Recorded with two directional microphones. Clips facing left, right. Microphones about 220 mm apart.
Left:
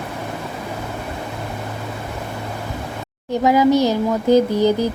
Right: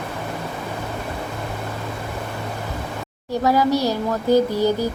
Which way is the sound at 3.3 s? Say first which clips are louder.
Left 4 dB; 20° left (ahead or behind).